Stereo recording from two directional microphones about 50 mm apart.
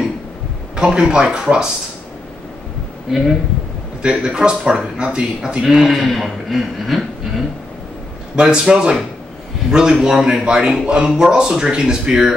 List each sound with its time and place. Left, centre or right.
0.7 s speech: centre
4.0 s speech: centre
5.6 s speech: centre
8.4 s speech: centre